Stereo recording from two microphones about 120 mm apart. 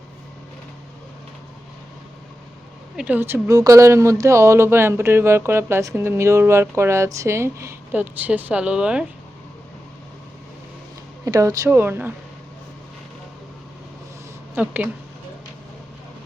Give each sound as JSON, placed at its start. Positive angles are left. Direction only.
{"t": 2.9, "sound": "speech", "side_deg": -10}
{"t": 11.3, "sound": "speech", "side_deg": -30}
{"t": 14.5, "sound": "speech", "side_deg": -15}